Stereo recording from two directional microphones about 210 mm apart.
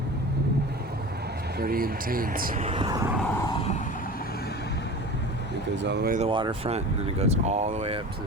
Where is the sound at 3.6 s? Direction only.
40° left (ahead or behind).